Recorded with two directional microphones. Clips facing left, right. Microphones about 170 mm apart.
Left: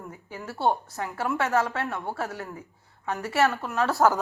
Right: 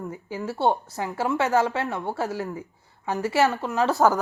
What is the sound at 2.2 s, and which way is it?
Speech, centre (ahead or behind).